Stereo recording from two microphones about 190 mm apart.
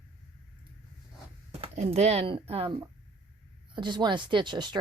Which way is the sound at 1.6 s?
35° right (ahead or behind).